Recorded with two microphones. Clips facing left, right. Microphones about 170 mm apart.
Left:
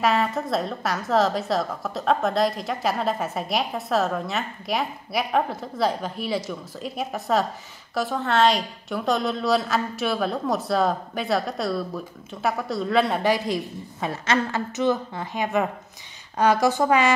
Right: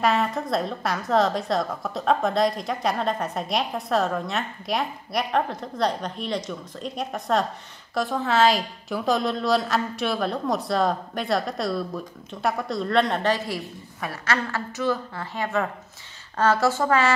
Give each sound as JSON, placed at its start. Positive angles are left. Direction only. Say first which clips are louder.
{"t": 0.0, "sound": "a woman's voice", "louder": "left 1 dB", "side_deg": 0}